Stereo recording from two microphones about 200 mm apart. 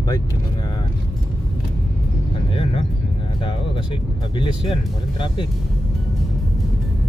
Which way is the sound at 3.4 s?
25° left (ahead or behind).